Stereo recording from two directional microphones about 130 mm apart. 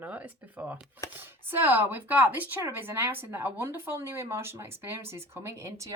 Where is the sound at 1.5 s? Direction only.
15° right (ahead or behind).